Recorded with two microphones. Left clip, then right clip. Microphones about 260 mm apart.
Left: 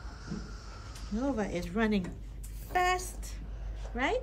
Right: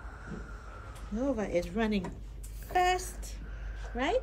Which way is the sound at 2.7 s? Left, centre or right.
Centre.